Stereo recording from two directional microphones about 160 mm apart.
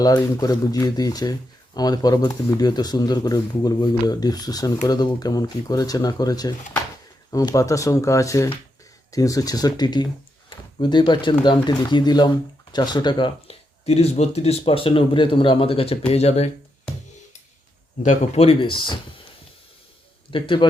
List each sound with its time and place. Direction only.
0.0 s speech: 25° left (ahead or behind); by 16.5 s 40° left (ahead or behind)
18.0 s speech: 45° left (ahead or behind)
20.3 s speech: 30° left (ahead or behind)